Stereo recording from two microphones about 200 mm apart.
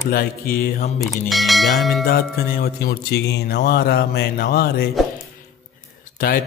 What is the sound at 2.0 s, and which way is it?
Speech, 50° left (ahead or behind).